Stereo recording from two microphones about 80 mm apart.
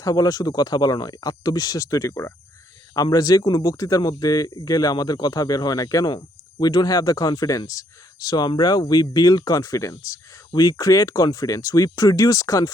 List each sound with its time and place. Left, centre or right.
0.0 s speech: left
2.9 s speech: left
10.5 s speech: left